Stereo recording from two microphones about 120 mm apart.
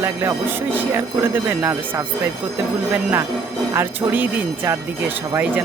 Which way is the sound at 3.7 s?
20° right (ahead or behind).